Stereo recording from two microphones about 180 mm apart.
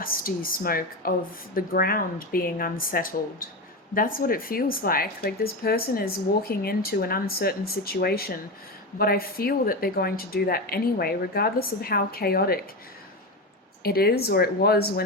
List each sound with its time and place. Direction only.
0.0 s speech: 55° left (ahead or behind)
13.8 s speech: 60° left (ahead or behind)